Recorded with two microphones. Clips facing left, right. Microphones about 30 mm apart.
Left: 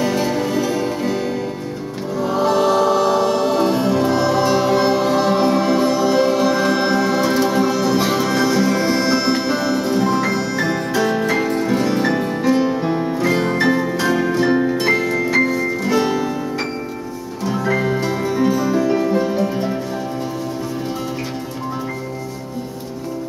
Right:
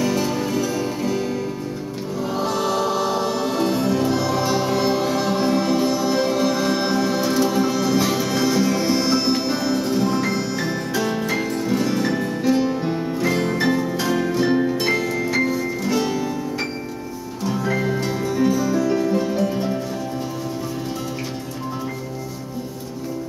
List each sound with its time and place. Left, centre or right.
0.2 s music: centre
7.6 s music: centre
8.0 s music: centre
17.5 s music: centre